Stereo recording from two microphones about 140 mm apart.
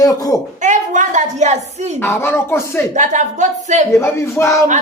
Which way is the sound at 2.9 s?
60° right (ahead or behind).